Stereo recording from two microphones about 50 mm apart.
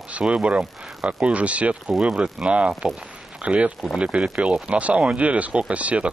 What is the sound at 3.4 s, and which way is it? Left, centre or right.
Speech, right.